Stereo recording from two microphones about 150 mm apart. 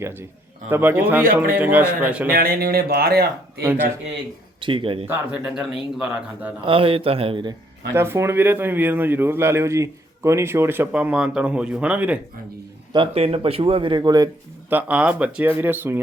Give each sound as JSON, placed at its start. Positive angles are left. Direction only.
{"t": 0.0, "sound": "speech", "side_deg": -15}
{"t": 2.3, "sound": "speech", "side_deg": -80}
{"t": 3.6, "sound": "speech", "side_deg": -15}
{"t": 4.6, "sound": "a man's voice", "side_deg": -35}
{"t": 5.0, "sound": "speech", "side_deg": -10}
{"t": 6.7, "sound": "a man's voice", "side_deg": -40}
{"t": 7.9, "sound": "speech", "side_deg": -15}
{"t": 12.9, "sound": "a man's voice", "side_deg": -35}
{"t": 14.7, "sound": "speech", "side_deg": -10}